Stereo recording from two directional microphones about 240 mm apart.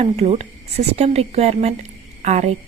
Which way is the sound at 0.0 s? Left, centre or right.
Right.